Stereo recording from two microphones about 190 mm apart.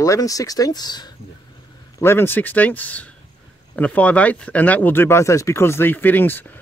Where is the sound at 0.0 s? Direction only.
15° left (ahead or behind).